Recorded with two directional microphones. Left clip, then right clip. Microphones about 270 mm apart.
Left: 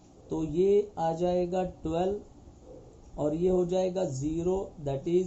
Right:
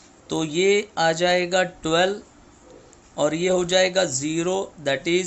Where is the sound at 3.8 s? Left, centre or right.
Right.